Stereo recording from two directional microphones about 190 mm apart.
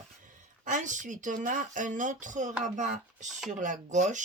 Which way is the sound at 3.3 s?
Centre (ahead or behind).